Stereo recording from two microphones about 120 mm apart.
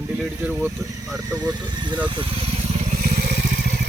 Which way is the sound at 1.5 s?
35° right (ahead or behind).